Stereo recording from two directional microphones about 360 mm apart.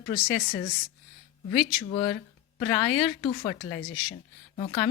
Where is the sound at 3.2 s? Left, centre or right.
Centre.